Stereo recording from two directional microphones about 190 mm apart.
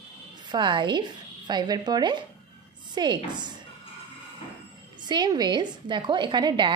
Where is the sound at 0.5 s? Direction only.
25° right (ahead or behind).